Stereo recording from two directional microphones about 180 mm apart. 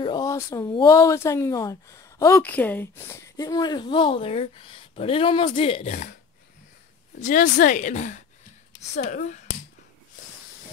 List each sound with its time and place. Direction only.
0.0 s speech: 20° left (ahead or behind); by 6.1 s 40° left (ahead or behind)
7.2 s a woman's voice: 50° left (ahead or behind)